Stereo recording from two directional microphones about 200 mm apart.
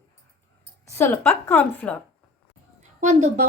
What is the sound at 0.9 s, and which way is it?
Speech, 10° left (ahead or behind).